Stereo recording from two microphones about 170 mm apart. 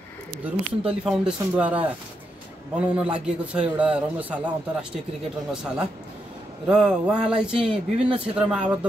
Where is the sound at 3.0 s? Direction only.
5° right (ahead or behind).